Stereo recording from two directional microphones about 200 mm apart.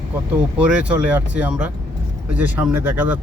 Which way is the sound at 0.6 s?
5° right (ahead or behind).